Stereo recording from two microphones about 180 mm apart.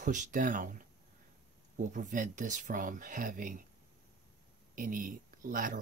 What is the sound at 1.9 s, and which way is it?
Speech, 45° right (ahead or behind).